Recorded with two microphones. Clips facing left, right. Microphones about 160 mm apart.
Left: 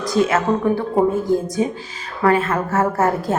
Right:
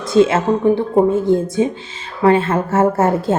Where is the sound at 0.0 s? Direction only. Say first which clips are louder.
Right 4 dB; 25° right (ahead or behind).